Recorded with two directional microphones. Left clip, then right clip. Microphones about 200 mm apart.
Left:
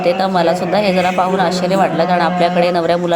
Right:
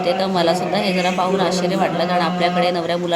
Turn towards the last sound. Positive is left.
turn(degrees=10)  # may be behind; listen again after turning